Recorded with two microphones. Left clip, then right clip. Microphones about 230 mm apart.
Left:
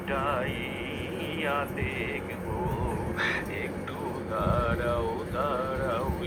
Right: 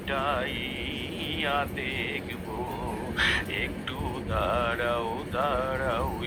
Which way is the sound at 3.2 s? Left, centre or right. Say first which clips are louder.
Right 4 dB; right.